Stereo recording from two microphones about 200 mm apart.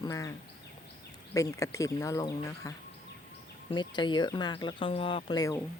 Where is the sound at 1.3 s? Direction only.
15° left (ahead or behind).